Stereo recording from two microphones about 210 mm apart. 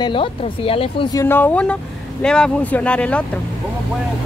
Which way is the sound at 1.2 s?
10° left (ahead or behind).